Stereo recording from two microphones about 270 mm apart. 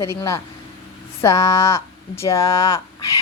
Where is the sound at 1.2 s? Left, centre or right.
Centre.